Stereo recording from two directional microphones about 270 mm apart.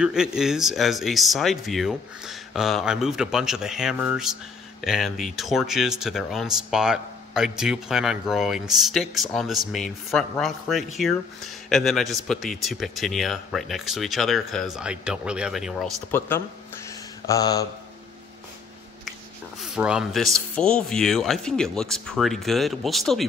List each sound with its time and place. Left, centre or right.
0.0 s speech: centre
19.6 s speech: centre